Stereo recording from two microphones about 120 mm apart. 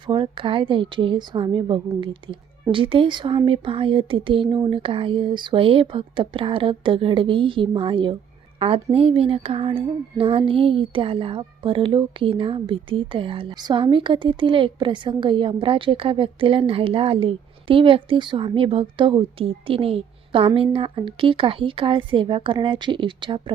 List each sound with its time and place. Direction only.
0.0 s speech: 45° right (ahead or behind)